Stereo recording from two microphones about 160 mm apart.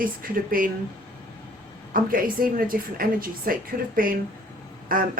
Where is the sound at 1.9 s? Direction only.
60° right (ahead or behind).